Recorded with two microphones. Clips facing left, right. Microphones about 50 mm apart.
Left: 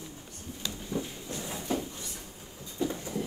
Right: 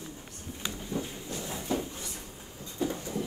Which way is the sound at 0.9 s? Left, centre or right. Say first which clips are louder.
Left 1 dB; left.